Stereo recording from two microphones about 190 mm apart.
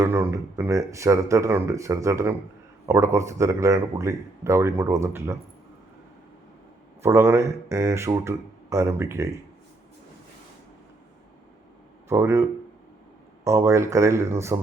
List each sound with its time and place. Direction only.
0.0 s speech: 15° right (ahead or behind)
7.0 s speech: 15° right (ahead or behind)
12.0 s speech: 15° right (ahead or behind)